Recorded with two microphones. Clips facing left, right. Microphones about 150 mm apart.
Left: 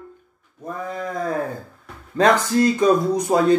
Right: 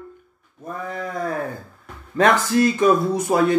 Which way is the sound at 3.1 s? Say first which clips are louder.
Left 1 dB; 20° left (ahead or behind).